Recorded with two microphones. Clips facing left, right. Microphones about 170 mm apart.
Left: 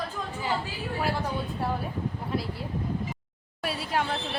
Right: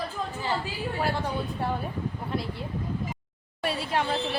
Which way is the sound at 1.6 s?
Centre (ahead or behind).